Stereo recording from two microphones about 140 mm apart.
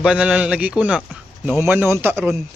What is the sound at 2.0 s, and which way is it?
Speech, 15° right (ahead or behind).